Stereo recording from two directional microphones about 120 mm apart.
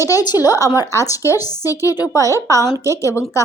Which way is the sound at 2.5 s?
25° right (ahead or behind).